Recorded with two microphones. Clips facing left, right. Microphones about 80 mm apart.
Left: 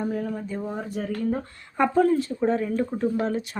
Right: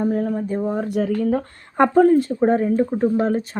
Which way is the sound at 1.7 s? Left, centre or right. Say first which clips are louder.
Right 6 dB; right.